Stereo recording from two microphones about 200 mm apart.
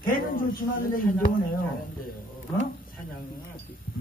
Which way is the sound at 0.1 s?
45° left (ahead or behind).